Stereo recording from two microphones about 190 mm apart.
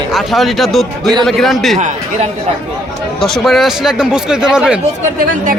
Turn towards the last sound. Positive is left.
turn(degrees=-5)  # may be behind; listen again after turning